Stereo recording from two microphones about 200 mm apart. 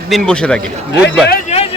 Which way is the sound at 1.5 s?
30° left (ahead or behind).